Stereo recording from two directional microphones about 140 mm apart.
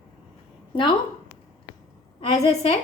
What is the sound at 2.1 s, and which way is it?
Speech, 50° left (ahead or behind).